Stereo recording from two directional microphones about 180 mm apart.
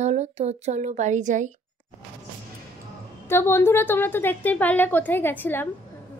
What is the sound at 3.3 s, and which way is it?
A woman's voice, 15° left (ahead or behind).